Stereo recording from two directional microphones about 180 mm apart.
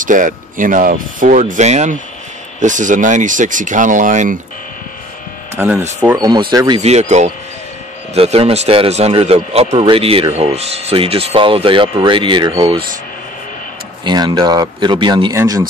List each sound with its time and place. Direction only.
0.0 s speech: 45° right (ahead or behind)
5.6 s speech: 5° right (ahead or behind)
6.1 s speech: 20° right (ahead or behind)
6.8 s speech: 35° right (ahead or behind)
14.0 s speech: 25° right (ahead or behind)